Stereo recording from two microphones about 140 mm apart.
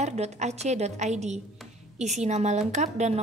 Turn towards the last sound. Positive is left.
turn(degrees=-55)  # may be behind; listen again after turning